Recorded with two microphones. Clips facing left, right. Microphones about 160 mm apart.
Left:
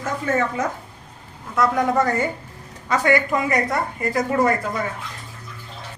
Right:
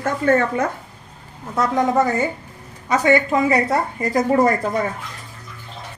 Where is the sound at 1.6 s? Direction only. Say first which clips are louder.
Right 1 dB; 20° right (ahead or behind).